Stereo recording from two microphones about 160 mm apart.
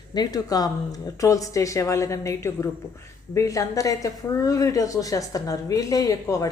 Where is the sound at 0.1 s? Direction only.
25° left (ahead or behind).